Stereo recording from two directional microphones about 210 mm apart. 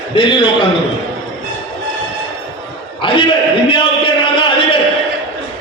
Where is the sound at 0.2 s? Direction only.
25° left (ahead or behind).